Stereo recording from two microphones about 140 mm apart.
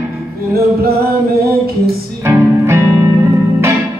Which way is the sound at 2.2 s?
20° right (ahead or behind).